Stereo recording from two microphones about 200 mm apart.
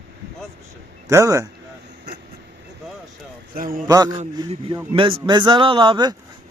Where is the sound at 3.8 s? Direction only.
20° right (ahead or behind).